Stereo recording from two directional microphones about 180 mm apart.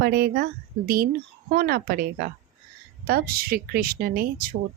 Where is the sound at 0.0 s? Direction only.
60° right (ahead or behind).